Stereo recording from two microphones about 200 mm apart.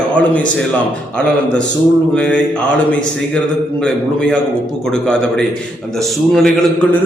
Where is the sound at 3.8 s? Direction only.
5° left (ahead or behind).